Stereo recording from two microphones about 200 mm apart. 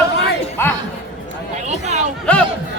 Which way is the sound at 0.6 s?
10° left (ahead or behind).